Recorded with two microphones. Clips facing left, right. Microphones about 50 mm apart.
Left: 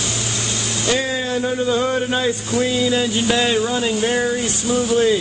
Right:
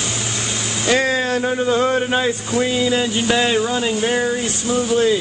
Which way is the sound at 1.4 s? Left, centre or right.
Right.